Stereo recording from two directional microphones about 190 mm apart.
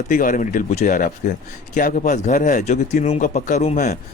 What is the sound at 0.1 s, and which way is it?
Speech, 45° left (ahead or behind).